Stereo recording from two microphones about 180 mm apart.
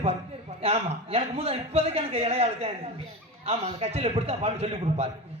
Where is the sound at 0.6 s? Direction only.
35° right (ahead or behind).